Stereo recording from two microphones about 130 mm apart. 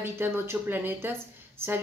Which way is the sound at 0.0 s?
15° right (ahead or behind).